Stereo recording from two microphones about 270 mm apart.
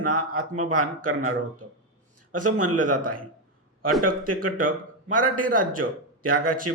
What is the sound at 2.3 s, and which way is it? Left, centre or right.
Speech, right.